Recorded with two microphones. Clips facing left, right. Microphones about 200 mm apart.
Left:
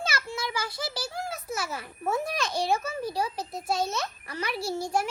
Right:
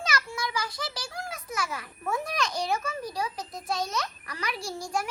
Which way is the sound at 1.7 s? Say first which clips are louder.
Left 2 dB; 30° left (ahead or behind).